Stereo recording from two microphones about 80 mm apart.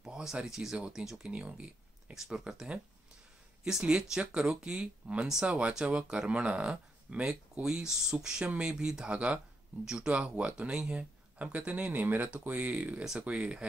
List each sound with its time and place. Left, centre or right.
0.0 s speech: centre